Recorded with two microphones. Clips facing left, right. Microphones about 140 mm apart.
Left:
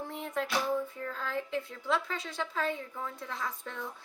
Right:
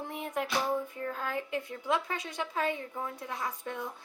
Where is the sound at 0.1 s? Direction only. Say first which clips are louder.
Right 1 dB; 15° right (ahead or behind).